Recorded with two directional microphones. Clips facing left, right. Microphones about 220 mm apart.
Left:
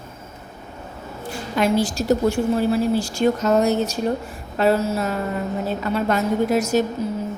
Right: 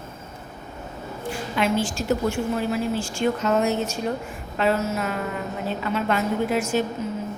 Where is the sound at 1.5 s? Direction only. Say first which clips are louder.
Left 4 dB; 40° left (ahead or behind).